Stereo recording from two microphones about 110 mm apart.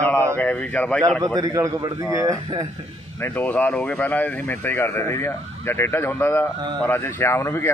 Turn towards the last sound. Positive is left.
turn(degrees=25)  # may be behind; listen again after turning